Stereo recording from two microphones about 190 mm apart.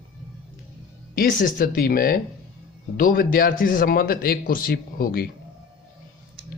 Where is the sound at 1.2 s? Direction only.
45° left (ahead or behind).